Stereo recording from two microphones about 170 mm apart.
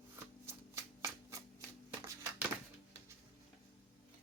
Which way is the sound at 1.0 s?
15° right (ahead or behind).